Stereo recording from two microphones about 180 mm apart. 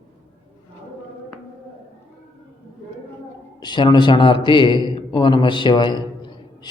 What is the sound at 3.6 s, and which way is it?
A man's voice, 25° left (ahead or behind).